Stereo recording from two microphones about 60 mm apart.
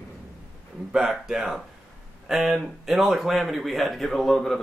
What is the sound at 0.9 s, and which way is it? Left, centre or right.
Speech, centre.